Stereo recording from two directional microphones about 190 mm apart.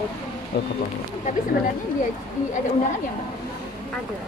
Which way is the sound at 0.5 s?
60° left (ahead or behind).